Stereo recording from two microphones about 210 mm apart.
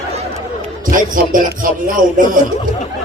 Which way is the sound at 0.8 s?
40° right (ahead or behind).